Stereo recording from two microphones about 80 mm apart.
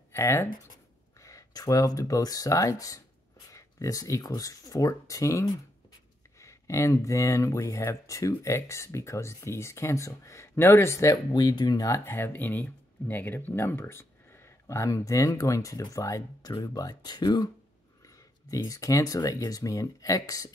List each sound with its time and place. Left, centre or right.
0.1 s speech: left
1.2 s speech: left
11.3 s speech: left
12.0 s speech: left
14.7 s speech: left
18.5 s speech: left